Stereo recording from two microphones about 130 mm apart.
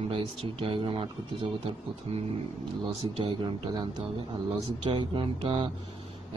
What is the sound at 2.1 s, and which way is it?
Speech, 55° right (ahead or behind).